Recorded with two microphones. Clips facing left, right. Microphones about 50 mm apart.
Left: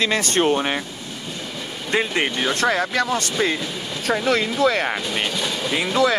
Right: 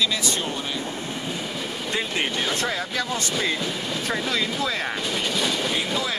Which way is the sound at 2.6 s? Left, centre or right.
Left.